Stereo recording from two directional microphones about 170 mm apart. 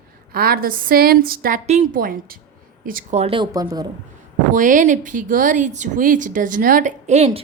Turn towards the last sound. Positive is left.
turn(degrees=-40)  # may be behind; listen again after turning